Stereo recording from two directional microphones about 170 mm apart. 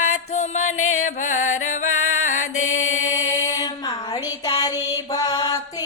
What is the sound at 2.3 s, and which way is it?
Mantra, 45° left (ahead or behind).